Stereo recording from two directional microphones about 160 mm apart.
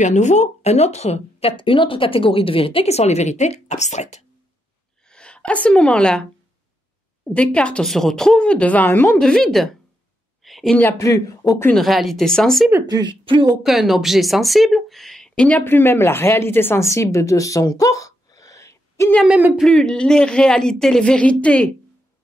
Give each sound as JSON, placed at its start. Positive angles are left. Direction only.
{"t": 0.0, "sound": "speech", "side_deg": 45}
{"t": 5.0, "sound": "speech", "side_deg": 5}
{"t": 7.3, "sound": "speech", "side_deg": 5}
{"t": 10.4, "sound": "a sound", "side_deg": 0}
{"t": 10.8, "sound": "speech", "side_deg": 15}
{"t": 11.7, "sound": "speech", "side_deg": 0}
{"t": 12.8, "sound": "a woman's voice", "side_deg": -25}
{"t": 13.6, "sound": "speech", "side_deg": 0}
{"t": 16.9, "sound": "a sound", "side_deg": 20}
{"t": 19.2, "sound": "speech", "side_deg": -5}